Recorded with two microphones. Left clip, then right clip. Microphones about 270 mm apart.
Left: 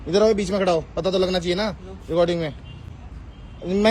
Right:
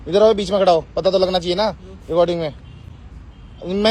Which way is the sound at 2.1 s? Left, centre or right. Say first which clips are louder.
Right 4 dB; right.